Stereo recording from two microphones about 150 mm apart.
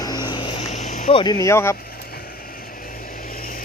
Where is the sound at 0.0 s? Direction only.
30° left (ahead or behind).